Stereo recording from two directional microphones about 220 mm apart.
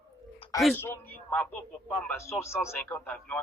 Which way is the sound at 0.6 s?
5° left (ahead or behind).